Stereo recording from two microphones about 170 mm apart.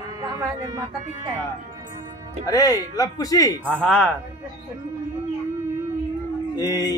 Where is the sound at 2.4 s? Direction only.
20° left (ahead or behind).